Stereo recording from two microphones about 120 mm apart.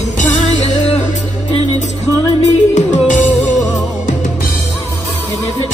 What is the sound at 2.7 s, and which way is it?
Music, 90° left.